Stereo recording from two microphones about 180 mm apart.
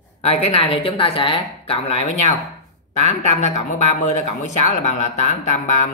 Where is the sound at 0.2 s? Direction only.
35° left (ahead or behind).